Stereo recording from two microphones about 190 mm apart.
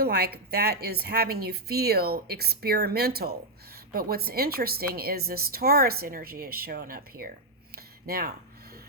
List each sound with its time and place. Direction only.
0.0 s a woman's voice: 55° right (ahead or behind)